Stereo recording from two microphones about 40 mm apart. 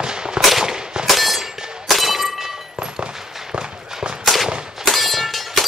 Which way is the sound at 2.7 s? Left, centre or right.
Right.